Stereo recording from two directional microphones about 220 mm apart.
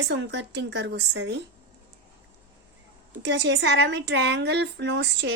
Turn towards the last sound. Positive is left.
turn(degrees=-50)  # may be behind; listen again after turning